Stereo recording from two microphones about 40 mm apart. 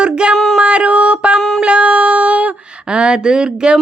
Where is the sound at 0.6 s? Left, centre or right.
Right.